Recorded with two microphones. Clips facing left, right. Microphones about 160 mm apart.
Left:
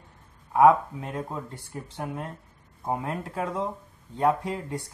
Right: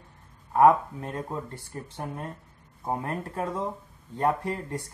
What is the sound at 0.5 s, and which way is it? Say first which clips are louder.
Speech: left 1 dB; 5° left (ahead or behind).